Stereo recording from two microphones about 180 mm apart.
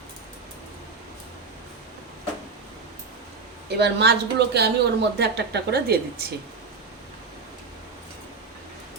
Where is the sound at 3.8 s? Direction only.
65° right (ahead or behind).